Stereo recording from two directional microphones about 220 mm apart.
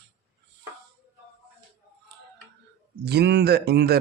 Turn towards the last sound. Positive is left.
turn(degrees=-45)  # may be behind; listen again after turning